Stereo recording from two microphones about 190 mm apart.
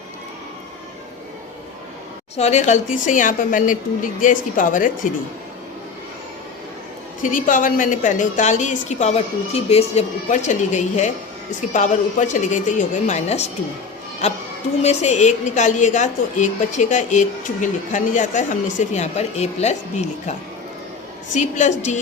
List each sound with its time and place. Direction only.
2.3 s a woman's voice: 35° left (ahead or behind)
7.2 s a woman's voice: 45° left (ahead or behind)
14.8 s a woman's voice: 35° left (ahead or behind)
21.3 s a woman's voice: 40° left (ahead or behind)